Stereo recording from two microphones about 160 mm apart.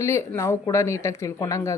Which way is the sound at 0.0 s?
20° left (ahead or behind).